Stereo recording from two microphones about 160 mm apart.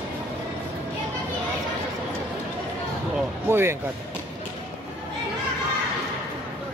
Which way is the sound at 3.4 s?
15° right (ahead or behind).